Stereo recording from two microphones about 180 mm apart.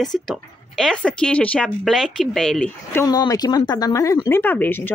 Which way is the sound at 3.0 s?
20° left (ahead or behind).